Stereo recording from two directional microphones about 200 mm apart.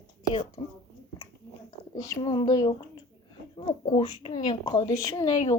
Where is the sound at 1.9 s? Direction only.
15° left (ahead or behind).